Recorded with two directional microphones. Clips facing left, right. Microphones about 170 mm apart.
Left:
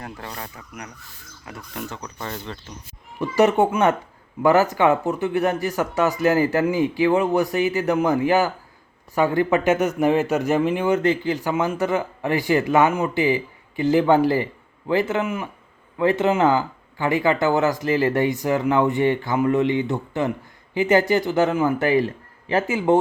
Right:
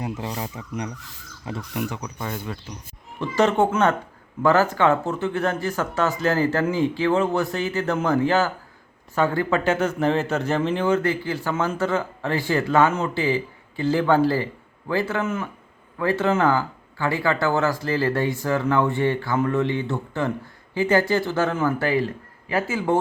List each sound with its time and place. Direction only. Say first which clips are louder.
0.0 s speech: right 5 dB; 20° right (ahead or behind)
1.7 s speech: right 3 dB; 15° right (ahead or behind)
3.2 s a man's voice: left 2 dB; 10° left (ahead or behind)